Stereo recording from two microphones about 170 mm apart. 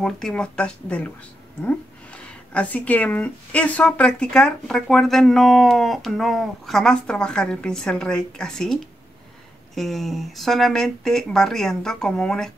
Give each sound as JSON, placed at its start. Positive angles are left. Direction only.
{"t": 0.0, "sound": "speech", "side_deg": 5}
{"t": 9.8, "sound": "speech", "side_deg": 0}